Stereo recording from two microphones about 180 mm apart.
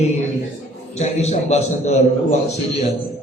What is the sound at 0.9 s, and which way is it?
Speech, 40° left (ahead or behind).